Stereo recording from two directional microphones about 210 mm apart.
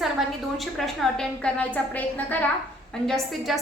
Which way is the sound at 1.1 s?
5° left (ahead or behind).